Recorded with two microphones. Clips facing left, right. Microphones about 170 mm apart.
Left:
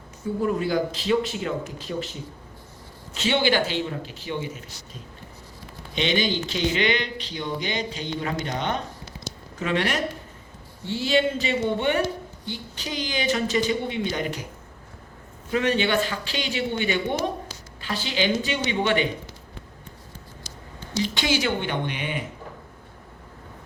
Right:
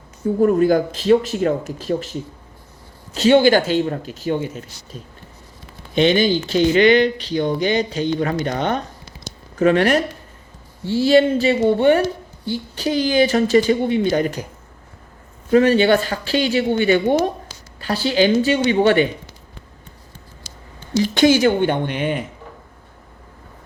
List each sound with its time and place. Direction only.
0.4 s speech: 45° right (ahead or behind)
3.2 s speech: 45° right (ahead or behind)
5.9 s speech: 45° right (ahead or behind)
15.5 s speech: 40° right (ahead or behind)
21.0 s speech: 50° right (ahead or behind)